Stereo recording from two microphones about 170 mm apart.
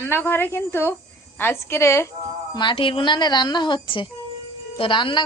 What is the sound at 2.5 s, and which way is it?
A woman's voice, 25° left (ahead or behind).